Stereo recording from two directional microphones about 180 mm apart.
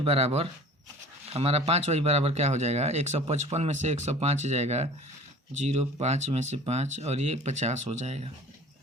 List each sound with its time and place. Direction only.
0.0 s speech: 35° right (ahead or behind)